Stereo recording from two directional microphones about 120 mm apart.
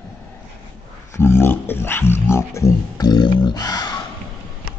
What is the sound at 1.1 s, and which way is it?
Speech, 20° left (ahead or behind).